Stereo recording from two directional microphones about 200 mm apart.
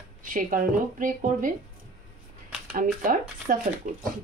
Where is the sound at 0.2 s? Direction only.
40° right (ahead or behind).